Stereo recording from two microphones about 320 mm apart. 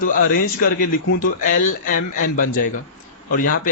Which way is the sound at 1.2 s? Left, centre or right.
Left.